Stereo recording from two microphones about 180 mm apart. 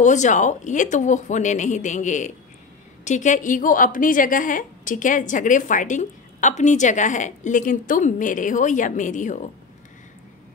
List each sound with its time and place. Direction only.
0.0 s a woman's voice: 40° left (ahead or behind)